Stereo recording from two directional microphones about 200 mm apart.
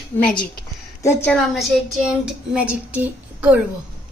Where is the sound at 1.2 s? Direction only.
Centre (ahead or behind).